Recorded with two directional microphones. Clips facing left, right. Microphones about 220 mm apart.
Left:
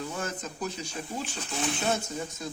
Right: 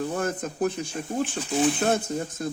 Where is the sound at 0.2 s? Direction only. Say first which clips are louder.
Right 8 dB; 55° right (ahead or behind).